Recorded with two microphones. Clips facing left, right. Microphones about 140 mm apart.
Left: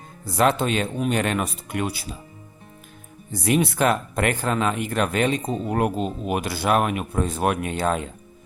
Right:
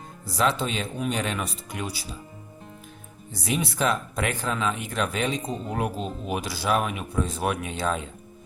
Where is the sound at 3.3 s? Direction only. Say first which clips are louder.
Left 7 dB; 55° left (ahead or behind).